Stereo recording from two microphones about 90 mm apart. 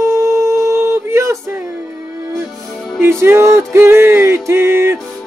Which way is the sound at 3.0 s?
25° right (ahead or behind).